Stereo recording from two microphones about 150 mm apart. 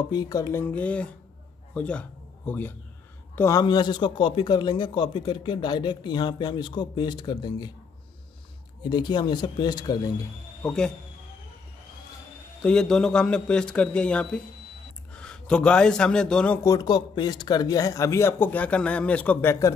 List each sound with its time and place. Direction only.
0.1 s a man's voice: 25° left (ahead or behind)
8.8 s speech: 30° left (ahead or behind)
10.6 s speech: 5° left (ahead or behind)
12.6 s a man's voice: 5° left (ahead or behind)
16.6 s speech: 25° left (ahead or behind)